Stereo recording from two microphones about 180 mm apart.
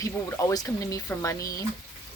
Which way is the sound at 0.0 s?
20° left (ahead or behind).